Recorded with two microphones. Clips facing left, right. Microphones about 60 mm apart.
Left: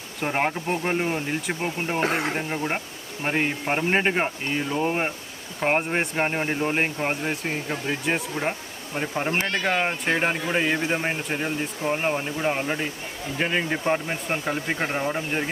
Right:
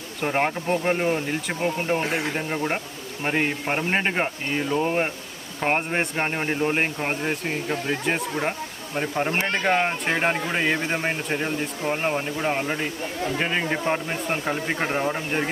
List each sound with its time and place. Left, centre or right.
0.2 s speech: centre
2.0 s speech: left
2.5 s speech: centre